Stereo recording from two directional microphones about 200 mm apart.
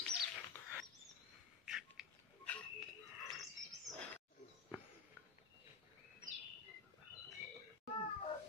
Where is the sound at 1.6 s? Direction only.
Centre (ahead or behind).